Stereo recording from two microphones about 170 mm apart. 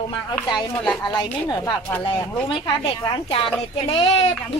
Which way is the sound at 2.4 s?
30° left (ahead or behind).